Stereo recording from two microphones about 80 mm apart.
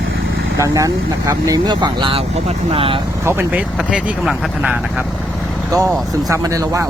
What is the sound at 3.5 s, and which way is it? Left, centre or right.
Speech, centre.